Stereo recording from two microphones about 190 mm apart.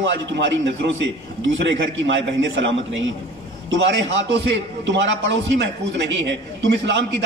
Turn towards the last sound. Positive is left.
turn(degrees=-70)  # may be behind; listen again after turning